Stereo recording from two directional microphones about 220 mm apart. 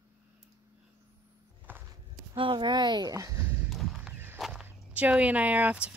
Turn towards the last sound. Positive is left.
turn(degrees=-5)  # may be behind; listen again after turning